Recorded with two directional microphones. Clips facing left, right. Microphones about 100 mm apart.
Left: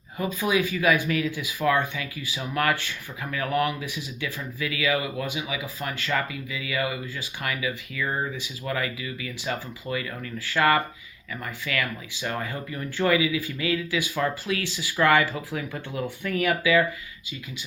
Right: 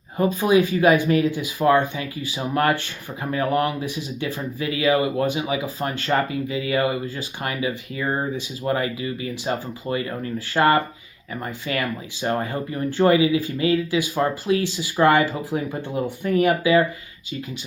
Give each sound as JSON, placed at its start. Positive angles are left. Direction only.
{"t": 0.2, "sound": "speech", "side_deg": -30}
{"t": 6.1, "sound": "speech", "side_deg": -35}